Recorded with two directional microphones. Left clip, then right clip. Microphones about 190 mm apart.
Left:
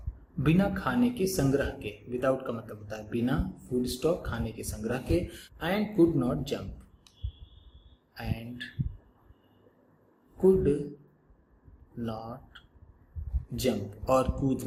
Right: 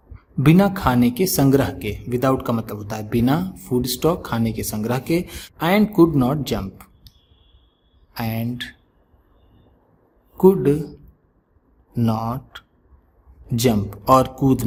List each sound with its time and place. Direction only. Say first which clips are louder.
0.4 s speech: right 11 dB; 60° right (ahead or behind)
8.1 s speech: right 13 dB; 55° right (ahead or behind)
10.3 s speech: right 8 dB; 55° right (ahead or behind)
11.9 s a man's voice: right 14 dB; 55° right (ahead or behind)